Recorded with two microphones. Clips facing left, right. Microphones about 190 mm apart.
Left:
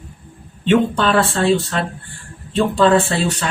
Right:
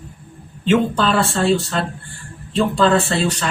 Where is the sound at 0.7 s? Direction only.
Centre (ahead or behind).